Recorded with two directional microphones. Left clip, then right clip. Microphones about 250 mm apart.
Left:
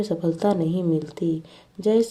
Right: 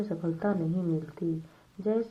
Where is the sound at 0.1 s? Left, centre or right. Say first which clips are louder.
Left 10 dB; left.